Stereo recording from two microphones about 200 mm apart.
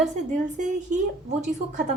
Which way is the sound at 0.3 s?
40° right (ahead or behind).